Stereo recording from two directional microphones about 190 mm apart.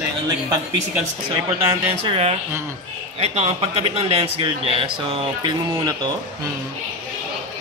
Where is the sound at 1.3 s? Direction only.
25° right (ahead or behind).